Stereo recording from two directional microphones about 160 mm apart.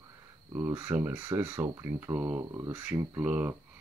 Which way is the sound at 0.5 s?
15° right (ahead or behind).